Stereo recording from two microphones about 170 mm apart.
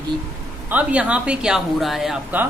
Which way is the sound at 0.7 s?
10° right (ahead or behind).